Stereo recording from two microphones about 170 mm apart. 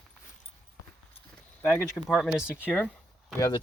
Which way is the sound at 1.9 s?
Centre (ahead or behind).